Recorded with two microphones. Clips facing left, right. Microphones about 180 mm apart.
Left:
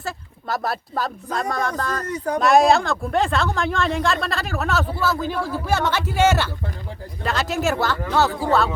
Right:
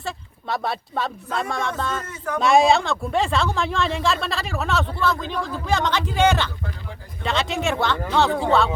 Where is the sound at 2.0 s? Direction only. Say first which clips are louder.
Left 4 dB; 35° left (ahead or behind).